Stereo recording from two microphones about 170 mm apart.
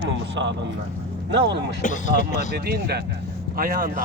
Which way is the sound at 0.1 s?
90° right.